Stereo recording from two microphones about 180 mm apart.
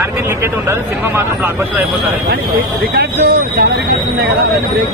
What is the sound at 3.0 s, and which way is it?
Speech, 60° right (ahead or behind).